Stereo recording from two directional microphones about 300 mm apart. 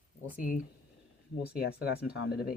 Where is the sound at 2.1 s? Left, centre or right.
Left.